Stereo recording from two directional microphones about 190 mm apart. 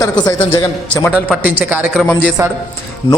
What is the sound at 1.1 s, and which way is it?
Speech, 5° right (ahead or behind).